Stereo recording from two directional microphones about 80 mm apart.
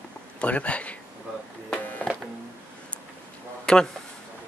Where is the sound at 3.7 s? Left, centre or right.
Centre.